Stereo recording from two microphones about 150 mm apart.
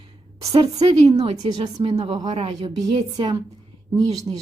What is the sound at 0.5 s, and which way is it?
A woman's voice, 25° right (ahead or behind).